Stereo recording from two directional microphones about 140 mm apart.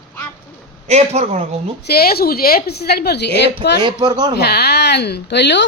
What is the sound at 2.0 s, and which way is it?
A woman's voice, 90° left.